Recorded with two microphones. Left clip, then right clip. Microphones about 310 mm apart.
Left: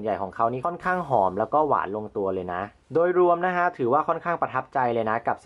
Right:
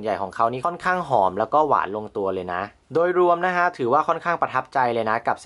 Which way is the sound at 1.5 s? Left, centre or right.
Centre.